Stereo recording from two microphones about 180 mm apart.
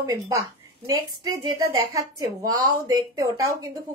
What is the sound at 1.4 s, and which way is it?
Speech, 20° right (ahead or behind).